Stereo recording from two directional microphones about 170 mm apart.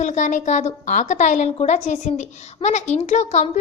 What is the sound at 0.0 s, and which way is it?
A woman's voice, 45° left (ahead or behind).